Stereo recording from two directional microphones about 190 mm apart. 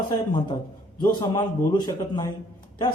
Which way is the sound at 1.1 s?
20° left (ahead or behind).